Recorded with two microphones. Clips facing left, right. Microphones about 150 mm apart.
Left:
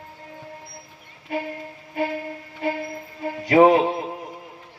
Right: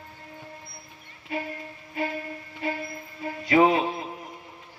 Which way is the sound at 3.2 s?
55° left (ahead or behind).